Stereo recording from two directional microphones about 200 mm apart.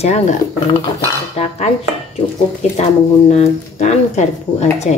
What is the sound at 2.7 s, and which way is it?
Speech, 30° left (ahead or behind).